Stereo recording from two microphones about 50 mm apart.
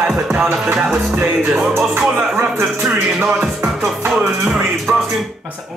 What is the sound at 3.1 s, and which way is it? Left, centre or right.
Music, centre.